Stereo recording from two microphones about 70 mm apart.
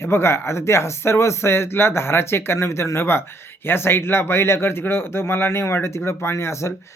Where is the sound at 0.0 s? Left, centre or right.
Left.